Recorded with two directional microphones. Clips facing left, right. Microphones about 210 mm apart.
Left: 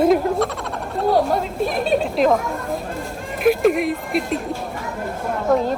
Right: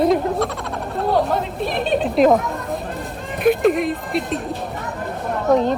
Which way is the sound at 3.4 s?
Centre (ahead or behind).